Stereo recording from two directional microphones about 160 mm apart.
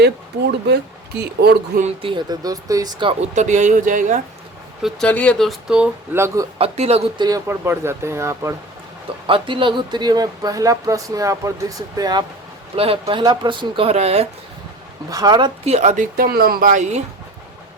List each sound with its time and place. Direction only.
0.0 s speech: 90° right
2.0 s speech: 30° right (ahead or behind)
3.3 s speech: 50° right (ahead or behind)
4.8 s speech: 5° left (ahead or behind); by 6.5 s 20° right (ahead or behind)
6.6 s speech: 40° right (ahead or behind)
7.2 s speech: 20° right (ahead or behind)
9.2 s speech: 30° right (ahead or behind)
12.7 s speech: 35° right (ahead or behind)
15.1 s speech: 25° right (ahead or behind)
15.6 s speech: 40° right (ahead or behind)